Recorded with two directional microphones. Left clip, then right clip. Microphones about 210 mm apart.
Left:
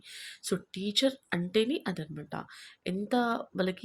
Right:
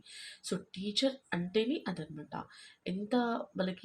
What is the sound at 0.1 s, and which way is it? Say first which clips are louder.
Speech: left 5 dB; 45° left (ahead or behind).